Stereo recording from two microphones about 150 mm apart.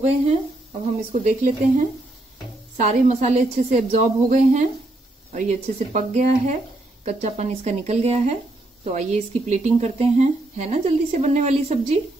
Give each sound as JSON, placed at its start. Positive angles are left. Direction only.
{"t": 0.8, "sound": "a woman's voice", "side_deg": -50}